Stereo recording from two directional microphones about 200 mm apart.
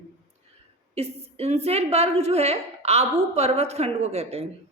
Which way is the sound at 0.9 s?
30° right (ahead or behind).